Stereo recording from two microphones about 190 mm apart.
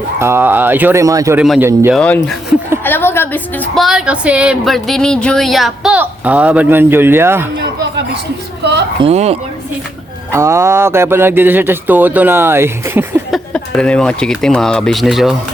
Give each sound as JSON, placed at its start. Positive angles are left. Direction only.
{"t": 0.2, "sound": "speech", "side_deg": -10}
{"t": 1.9, "sound": "a woman's voice", "side_deg": 5}
{"t": 9.0, "sound": "speech", "side_deg": -35}
{"t": 10.3, "sound": "speech", "side_deg": -15}
{"t": 13.3, "sound": "speech", "side_deg": 5}